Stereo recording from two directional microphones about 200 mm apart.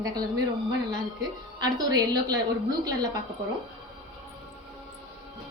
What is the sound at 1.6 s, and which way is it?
A woman's voice, 20° right (ahead or behind).